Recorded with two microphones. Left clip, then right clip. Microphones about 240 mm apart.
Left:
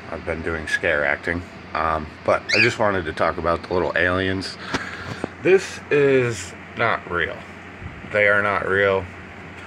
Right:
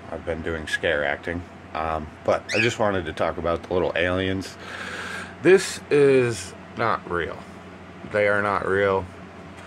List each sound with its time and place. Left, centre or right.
0.3 s speech: centre
5.9 s speech: centre